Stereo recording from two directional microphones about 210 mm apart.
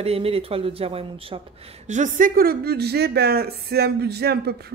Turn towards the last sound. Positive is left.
turn(degrees=-50)  # may be behind; listen again after turning